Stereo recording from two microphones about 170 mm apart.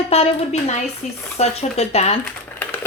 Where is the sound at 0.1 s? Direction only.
40° left (ahead or behind).